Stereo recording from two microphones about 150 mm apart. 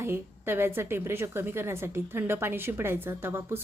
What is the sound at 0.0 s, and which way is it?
Speech, 15° right (ahead or behind).